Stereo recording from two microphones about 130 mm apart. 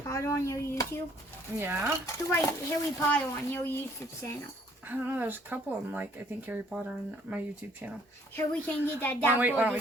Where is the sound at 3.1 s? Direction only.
15° left (ahead or behind).